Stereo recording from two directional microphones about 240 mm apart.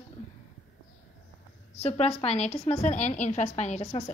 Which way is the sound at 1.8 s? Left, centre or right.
Left.